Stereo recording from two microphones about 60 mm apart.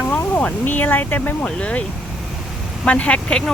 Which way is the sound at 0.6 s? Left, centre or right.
Left.